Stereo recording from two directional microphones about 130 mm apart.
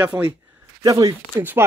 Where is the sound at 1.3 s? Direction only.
15° right (ahead or behind).